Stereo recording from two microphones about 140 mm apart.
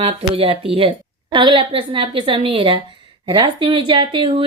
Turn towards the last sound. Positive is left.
turn(degrees=-40)  # may be behind; listen again after turning